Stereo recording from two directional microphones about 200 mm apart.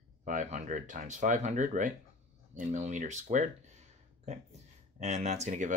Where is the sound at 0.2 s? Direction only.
35° right (ahead or behind).